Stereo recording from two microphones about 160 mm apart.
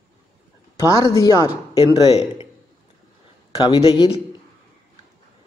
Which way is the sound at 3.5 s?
25° left (ahead or behind).